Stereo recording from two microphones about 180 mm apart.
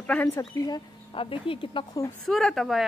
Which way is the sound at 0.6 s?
25° left (ahead or behind).